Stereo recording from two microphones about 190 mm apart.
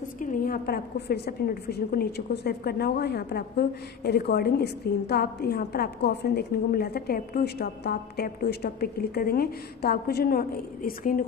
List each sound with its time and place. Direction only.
0.2 s a woman's voice: 45° left (ahead or behind)